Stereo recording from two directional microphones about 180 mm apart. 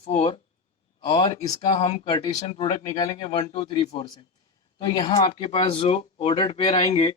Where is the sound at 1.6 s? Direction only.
35° left (ahead or behind).